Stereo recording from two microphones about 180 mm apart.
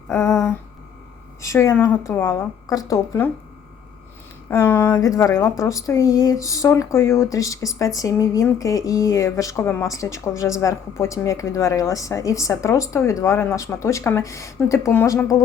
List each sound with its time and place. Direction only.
0.1 s speech: 15° left (ahead or behind)
4.4 s speech: 10° left (ahead or behind)